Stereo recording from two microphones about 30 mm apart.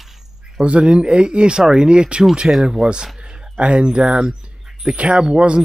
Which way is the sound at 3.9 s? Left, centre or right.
Right.